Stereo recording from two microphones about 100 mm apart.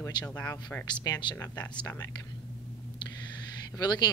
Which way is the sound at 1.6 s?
15° left (ahead or behind).